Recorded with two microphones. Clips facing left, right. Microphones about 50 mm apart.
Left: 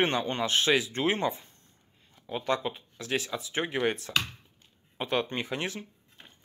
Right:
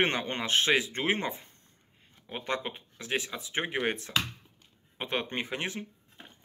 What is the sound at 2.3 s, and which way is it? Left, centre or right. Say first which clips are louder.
Speech: left 4 dB; right.